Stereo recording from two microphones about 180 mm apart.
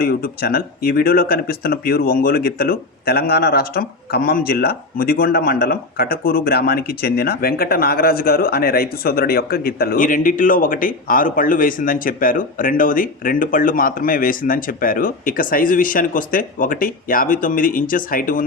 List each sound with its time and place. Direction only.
0.0 s speech: 55° left (ahead or behind)